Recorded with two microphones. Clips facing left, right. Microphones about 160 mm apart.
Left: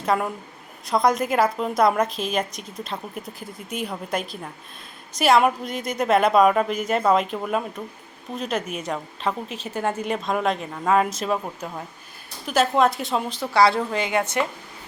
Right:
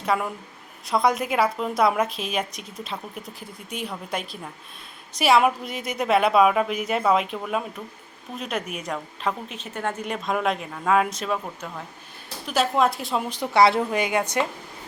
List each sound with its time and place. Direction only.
0.0 s a woman's voice: centre (ahead or behind)
12.5 s a woman's voice: centre (ahead or behind)
13.3 s a woman's voice: 20° right (ahead or behind)